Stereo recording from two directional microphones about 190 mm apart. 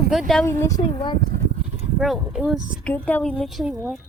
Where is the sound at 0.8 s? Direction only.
25° left (ahead or behind).